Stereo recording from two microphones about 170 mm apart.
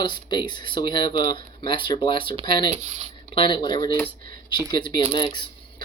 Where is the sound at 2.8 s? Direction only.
40° right (ahead or behind).